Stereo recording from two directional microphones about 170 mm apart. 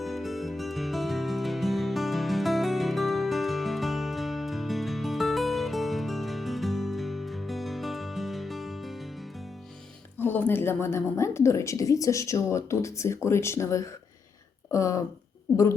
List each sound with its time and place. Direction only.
0.0 s music: centre (ahead or behind)
10.2 s a woman's voice: 10° left (ahead or behind)